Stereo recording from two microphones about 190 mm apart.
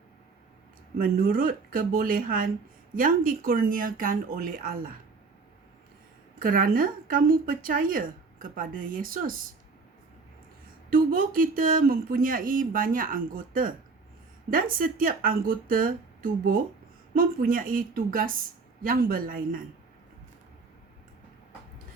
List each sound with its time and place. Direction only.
0.9 s speech: 50° right (ahead or behind)
6.4 s speech: 50° right (ahead or behind)
10.8 s speech: 50° right (ahead or behind)